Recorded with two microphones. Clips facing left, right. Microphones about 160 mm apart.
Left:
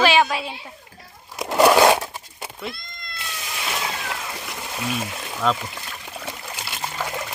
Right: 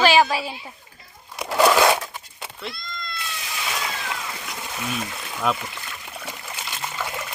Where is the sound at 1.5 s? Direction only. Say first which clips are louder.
Left 3 dB; 20° left (ahead or behind).